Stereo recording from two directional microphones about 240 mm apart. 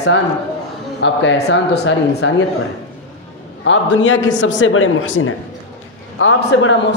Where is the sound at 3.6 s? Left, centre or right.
Left.